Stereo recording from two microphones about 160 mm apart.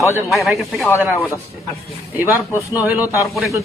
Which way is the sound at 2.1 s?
15° right (ahead or behind).